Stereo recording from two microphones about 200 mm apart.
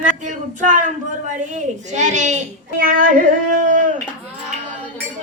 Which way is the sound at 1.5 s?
35° right (ahead or behind).